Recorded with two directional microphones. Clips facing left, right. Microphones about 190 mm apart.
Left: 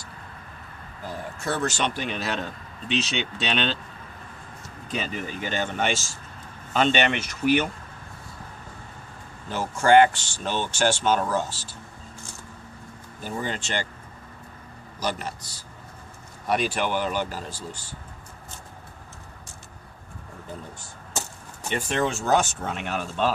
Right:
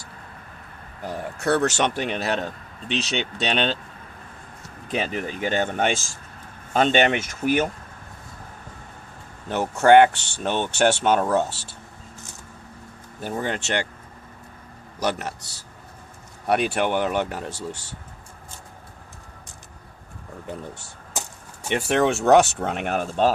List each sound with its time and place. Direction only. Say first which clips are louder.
1.0 s speech: right 6 dB; 70° right (ahead or behind)
3.4 s speech: right 3 dB; 45° right (ahead or behind)
4.9 s speech: right 4 dB; 55° right (ahead or behind)
9.5 s speech: right 4 dB; 65° right (ahead or behind)
13.2 s speech: right 4 dB; 60° right (ahead or behind)
14.9 s a man's voice: right 4 dB; 65° right (ahead or behind)
16.5 s speech: right 3 dB; 65° right (ahead or behind)
21.1 s arrow: even; 15° right (ahead or behind)
21.7 s speech: right 5 dB; 70° right (ahead or behind); by 23.3 s 45° right (ahead or behind)